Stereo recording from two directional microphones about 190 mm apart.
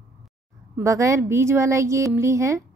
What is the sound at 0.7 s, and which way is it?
A woman's voice, 15° right (ahead or behind).